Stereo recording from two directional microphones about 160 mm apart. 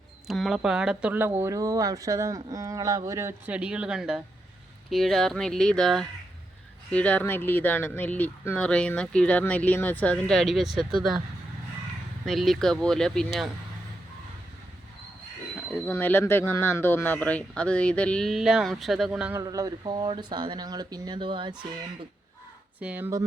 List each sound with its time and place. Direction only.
0.3 s speech: centre (ahead or behind)
12.2 s speech: centre (ahead or behind)
15.7 s speech: 10° left (ahead or behind)
19.3 s speech: 20° right (ahead or behind)
22.8 s speech: 10° right (ahead or behind)